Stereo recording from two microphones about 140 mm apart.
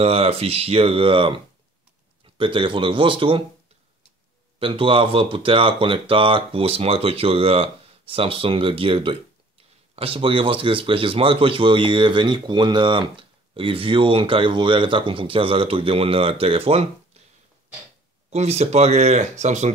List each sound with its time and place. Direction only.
0.0 s speech: 45° right (ahead or behind)
4.6 s speech: 40° right (ahead or behind)
18.3 s speech: 50° right (ahead or behind)